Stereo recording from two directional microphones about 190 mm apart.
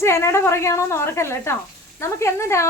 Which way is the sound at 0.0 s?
15° left (ahead or behind).